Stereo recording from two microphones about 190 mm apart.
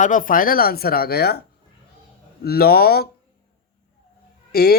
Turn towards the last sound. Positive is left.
turn(degrees=55)  # may be behind; listen again after turning